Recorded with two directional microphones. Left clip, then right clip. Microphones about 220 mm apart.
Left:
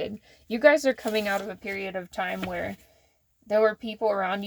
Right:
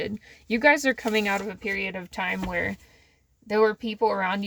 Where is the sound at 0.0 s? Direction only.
25° right (ahead or behind).